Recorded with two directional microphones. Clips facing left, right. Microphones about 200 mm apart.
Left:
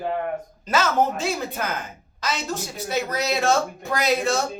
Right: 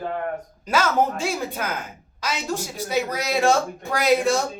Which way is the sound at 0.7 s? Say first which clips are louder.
Even; 10° right (ahead or behind).